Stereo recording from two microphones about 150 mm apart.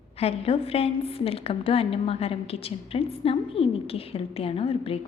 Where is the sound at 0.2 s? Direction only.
40° left (ahead or behind).